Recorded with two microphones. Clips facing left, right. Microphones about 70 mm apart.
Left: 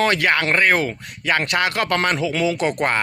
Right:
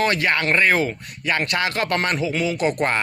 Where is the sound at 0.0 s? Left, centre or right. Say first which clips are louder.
Left 2 dB; left.